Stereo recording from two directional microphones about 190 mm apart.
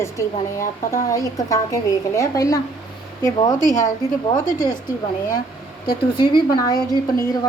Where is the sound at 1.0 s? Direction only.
15° left (ahead or behind).